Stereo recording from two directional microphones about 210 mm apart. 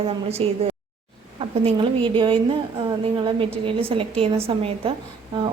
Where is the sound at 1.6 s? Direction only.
25° right (ahead or behind).